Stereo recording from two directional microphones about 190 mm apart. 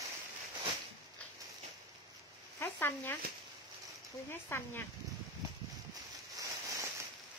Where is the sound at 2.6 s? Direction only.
10° left (ahead or behind).